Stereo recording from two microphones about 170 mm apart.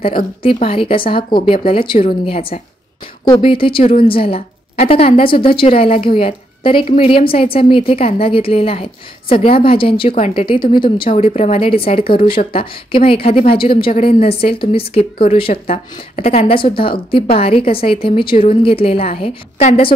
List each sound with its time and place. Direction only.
0.4 s a woman's voice: 35° left (ahead or behind)
10.8 s a woman's voice: 55° left (ahead or behind); by 19.9 s 35° left (ahead or behind)